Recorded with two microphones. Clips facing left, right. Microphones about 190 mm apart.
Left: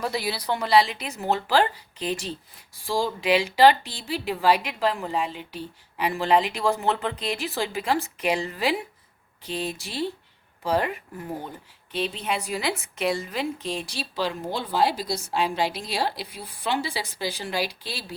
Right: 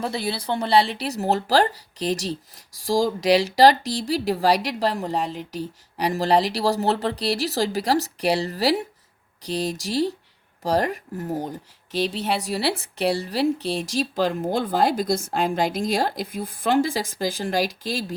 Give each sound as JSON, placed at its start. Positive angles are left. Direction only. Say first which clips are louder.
{"t": 0.0, "sound": "a woman's voice", "louder": "right 1 dB", "side_deg": -25}